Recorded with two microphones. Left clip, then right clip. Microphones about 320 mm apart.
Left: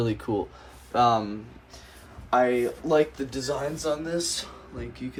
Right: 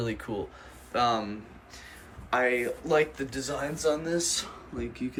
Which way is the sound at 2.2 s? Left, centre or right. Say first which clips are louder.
Left 4 dB; centre.